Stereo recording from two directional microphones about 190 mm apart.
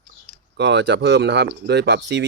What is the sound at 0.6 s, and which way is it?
Speech, 65° right (ahead or behind).